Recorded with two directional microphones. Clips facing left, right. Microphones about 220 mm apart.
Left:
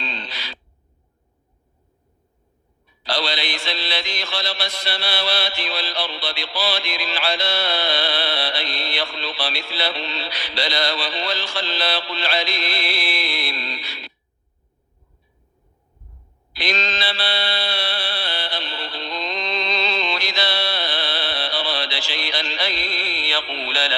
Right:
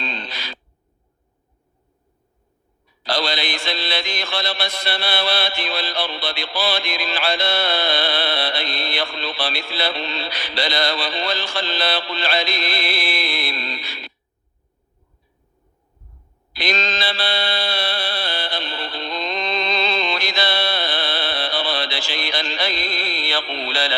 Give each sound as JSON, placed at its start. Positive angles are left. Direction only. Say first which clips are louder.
{"t": 0.0, "sound": "a sound", "louder": "right 2 dB", "side_deg": -45}
{"t": 3.0, "sound": "mantra", "louder": "right 2 dB", "side_deg": -45}
{"t": 16.5, "sound": "mantra", "louder": "right 2 dB", "side_deg": -45}